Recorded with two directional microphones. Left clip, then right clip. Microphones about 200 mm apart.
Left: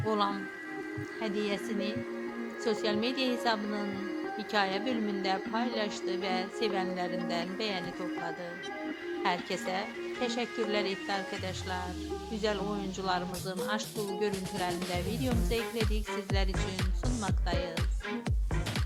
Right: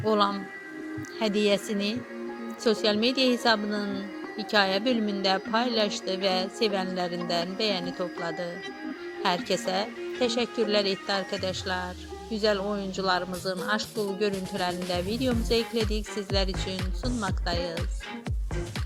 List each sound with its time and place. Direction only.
0.0 s a woman's voice: 25° right (ahead or behind)
14.9 s a woman's voice: 25° right (ahead or behind)